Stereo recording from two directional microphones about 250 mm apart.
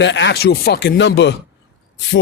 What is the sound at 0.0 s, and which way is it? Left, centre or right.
Speech, left.